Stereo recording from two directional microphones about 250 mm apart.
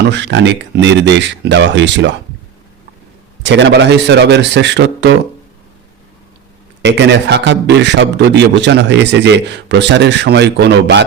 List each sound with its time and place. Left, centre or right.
0.0 s a man's voice: right
3.4 s a man's voice: right
6.8 s a man's voice: right